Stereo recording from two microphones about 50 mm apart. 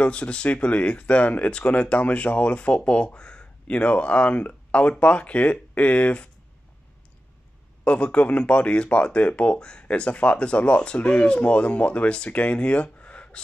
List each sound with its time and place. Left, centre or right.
0.0 s speech: left
7.8 s speech: left